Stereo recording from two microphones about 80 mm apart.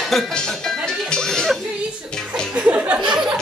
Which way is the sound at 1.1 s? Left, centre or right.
Centre.